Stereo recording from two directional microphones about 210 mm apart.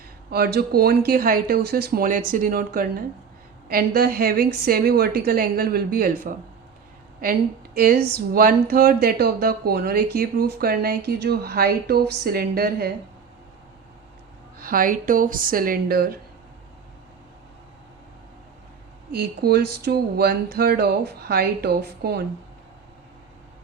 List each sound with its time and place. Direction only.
0.3 s speech: 50° right (ahead or behind)
14.6 s speech: 40° right (ahead or behind)
19.1 s speech: 50° right (ahead or behind)